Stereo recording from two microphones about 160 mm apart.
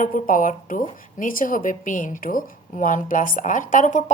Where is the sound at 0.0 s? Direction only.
55° left (ahead or behind).